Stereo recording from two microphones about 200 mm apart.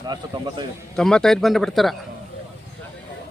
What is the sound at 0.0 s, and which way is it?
Speech, 20° right (ahead or behind).